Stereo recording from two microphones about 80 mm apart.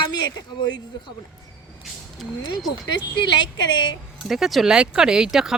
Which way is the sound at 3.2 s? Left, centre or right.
Left.